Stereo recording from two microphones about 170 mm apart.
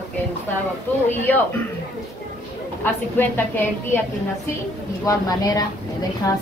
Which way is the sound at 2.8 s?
10° left (ahead or behind).